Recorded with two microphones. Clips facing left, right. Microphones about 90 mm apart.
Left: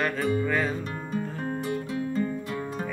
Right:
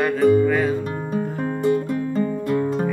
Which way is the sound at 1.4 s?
55° right (ahead or behind).